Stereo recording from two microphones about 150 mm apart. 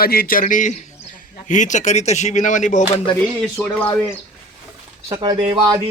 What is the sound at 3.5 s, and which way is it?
Speech, 10° left (ahead or behind).